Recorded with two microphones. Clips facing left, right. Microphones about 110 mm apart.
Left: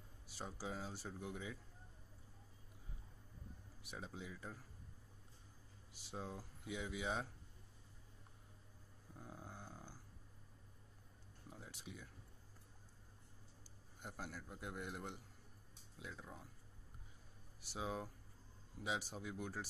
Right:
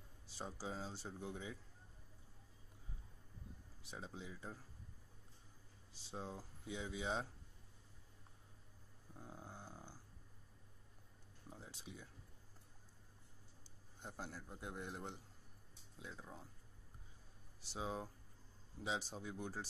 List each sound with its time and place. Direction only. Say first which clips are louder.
0.4 s speech: even; 20° right (ahead or behind)
3.8 s speech: even; 25° right (ahead or behind)
5.9 s speech: even; 25° right (ahead or behind)
9.2 s a sound: even; 20° right (ahead or behind)
11.4 s a sound: even; 25° right (ahead or behind)
14.0 s speech: even; 25° right (ahead or behind)
17.6 s speech: even; 25° right (ahead or behind)